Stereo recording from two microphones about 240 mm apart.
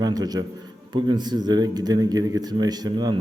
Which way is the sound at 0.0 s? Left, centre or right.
Centre.